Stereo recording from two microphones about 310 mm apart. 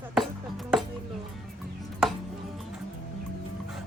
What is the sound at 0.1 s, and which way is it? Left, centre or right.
Music, centre.